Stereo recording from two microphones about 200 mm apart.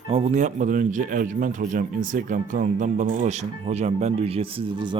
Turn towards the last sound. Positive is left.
turn(degrees=-25)  # may be behind; listen again after turning